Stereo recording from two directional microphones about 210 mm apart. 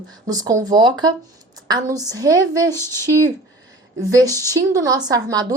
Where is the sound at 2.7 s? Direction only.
10° left (ahead or behind).